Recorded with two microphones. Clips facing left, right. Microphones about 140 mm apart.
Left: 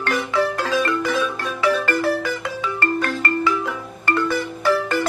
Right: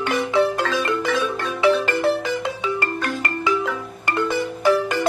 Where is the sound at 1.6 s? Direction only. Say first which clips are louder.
Right 2 dB; 25° right (ahead or behind).